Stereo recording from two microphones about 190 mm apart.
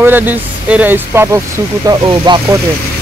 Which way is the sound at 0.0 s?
10° right (ahead or behind).